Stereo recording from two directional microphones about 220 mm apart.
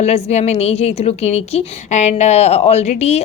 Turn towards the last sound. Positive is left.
turn(degrees=30)  # may be behind; listen again after turning